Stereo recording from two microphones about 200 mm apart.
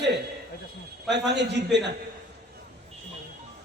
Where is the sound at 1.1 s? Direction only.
60° right (ahead or behind).